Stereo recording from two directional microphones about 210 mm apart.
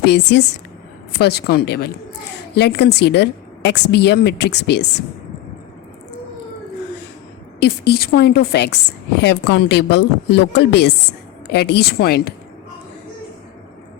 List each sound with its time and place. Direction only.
0.0 s a woman's voice: 55° left (ahead or behind)
7.6 s a woman's voice: 50° left (ahead or behind)